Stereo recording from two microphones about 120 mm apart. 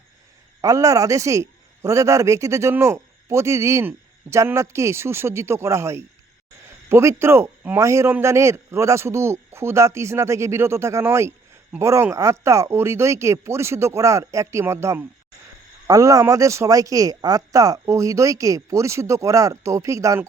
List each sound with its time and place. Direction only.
0.6 s a man's voice: 30° right (ahead or behind)